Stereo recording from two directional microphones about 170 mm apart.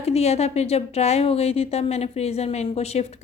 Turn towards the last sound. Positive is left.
turn(degrees=40)  # may be behind; listen again after turning